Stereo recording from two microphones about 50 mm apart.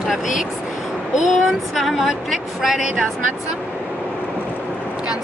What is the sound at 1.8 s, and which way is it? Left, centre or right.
Speech, centre.